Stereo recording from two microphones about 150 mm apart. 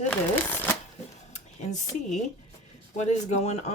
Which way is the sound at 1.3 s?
55° left (ahead or behind).